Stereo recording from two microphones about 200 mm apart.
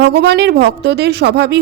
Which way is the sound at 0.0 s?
55° right (ahead or behind).